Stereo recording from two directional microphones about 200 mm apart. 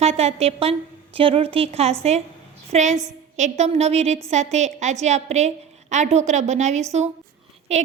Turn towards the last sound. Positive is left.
turn(degrees=-35)  # may be behind; listen again after turning